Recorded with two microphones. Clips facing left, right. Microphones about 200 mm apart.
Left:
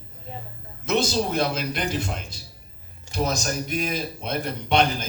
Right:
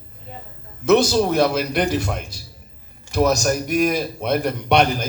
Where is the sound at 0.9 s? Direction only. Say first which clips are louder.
Right 8 dB; 55° right (ahead or behind).